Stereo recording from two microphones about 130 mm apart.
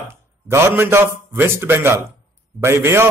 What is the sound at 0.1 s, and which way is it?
A man's voice, 20° right (ahead or behind).